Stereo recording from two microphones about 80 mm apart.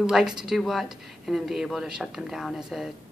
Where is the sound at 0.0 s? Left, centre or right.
Centre.